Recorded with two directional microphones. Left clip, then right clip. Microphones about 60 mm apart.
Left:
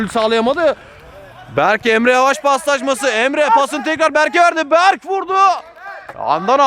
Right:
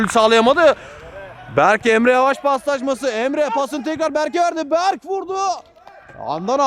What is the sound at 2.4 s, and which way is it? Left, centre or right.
Speech, centre.